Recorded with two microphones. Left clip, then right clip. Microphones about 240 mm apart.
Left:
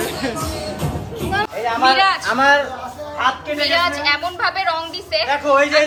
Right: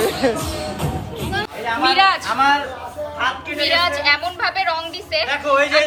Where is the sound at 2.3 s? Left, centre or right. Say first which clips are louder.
Left 2 dB; left.